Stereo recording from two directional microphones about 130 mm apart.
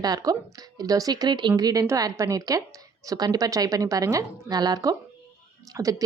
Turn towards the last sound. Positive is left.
turn(degrees=-25)  # may be behind; listen again after turning